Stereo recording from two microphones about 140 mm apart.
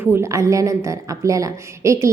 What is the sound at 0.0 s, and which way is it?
A woman's voice, 15° right (ahead or behind).